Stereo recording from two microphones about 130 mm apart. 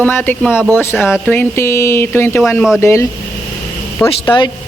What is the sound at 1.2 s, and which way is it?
Speech, 15° left (ahead or behind).